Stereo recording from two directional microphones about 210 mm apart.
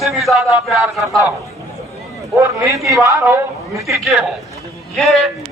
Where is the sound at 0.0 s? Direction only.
Centre (ahead or behind).